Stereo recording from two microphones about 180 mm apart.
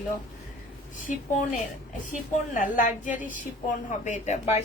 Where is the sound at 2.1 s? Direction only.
45° left (ahead or behind).